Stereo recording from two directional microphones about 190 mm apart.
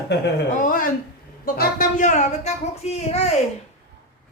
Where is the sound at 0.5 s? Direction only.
45° left (ahead or behind).